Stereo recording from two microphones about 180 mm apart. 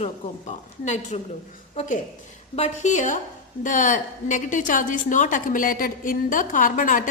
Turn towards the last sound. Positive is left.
turn(degrees=50)  # may be behind; listen again after turning